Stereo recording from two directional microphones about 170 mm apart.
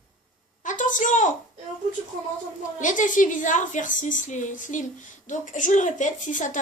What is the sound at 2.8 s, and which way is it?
A woman's voice, 50° left (ahead or behind).